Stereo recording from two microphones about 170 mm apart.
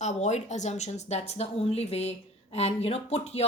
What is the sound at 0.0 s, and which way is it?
Speech, 40° left (ahead or behind).